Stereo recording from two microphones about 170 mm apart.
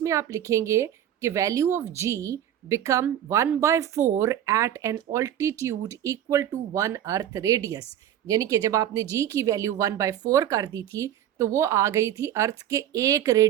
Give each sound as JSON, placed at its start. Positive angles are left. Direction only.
{"t": 0.0, "sound": "a woman's voice", "side_deg": -15}